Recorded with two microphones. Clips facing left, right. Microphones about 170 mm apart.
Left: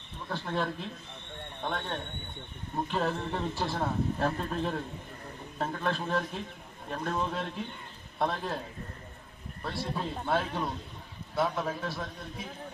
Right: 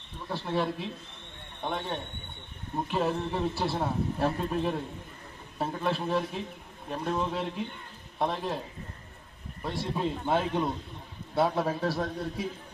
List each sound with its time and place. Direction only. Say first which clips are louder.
0.3 s a man's voice: right 3 dB; 10° right (ahead or behind)
9.6 s a man's voice: right 3 dB; 15° right (ahead or behind)
11.3 s a man's voice: right 4 dB; 35° right (ahead or behind)